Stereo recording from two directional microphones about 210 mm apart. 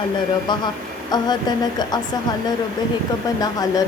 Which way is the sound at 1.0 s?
20° left (ahead or behind).